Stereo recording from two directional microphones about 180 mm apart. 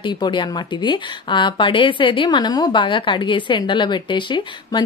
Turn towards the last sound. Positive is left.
turn(degrees=25)  # may be behind; listen again after turning